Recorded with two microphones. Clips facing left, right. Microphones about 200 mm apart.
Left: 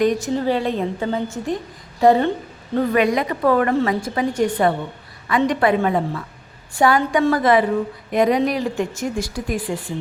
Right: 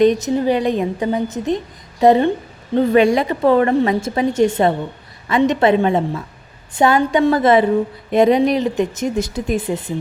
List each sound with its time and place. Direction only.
0.0 s a woman's voice: 20° right (ahead or behind)